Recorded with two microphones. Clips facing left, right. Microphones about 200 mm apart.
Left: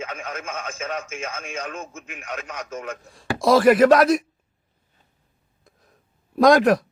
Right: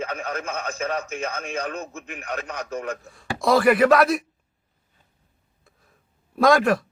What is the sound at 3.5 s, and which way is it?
Speech, 45° left (ahead or behind).